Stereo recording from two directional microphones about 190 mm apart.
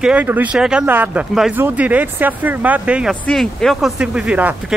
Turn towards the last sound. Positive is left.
turn(degrees=-5)  # may be behind; listen again after turning